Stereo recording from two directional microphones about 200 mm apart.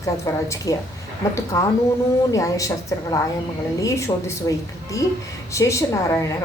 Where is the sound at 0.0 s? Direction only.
15° left (ahead or behind).